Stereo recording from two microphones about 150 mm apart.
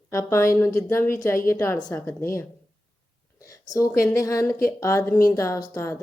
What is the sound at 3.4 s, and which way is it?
A woman's voice, 20° left (ahead or behind).